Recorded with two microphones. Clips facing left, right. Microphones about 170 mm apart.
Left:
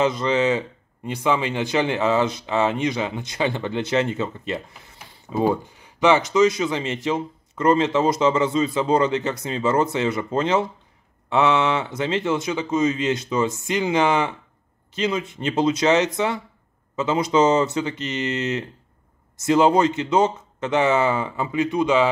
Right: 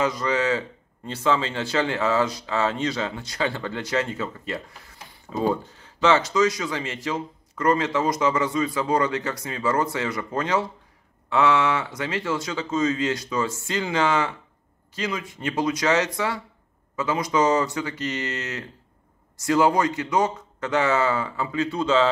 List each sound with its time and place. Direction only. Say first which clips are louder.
0.0 s speech: left 3 dB; 25° left (ahead or behind)